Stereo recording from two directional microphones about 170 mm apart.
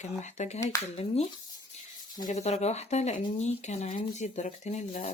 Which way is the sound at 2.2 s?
40° left (ahead or behind).